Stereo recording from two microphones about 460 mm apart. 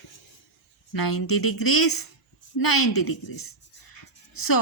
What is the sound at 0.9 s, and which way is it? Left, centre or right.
A woman's voice, left.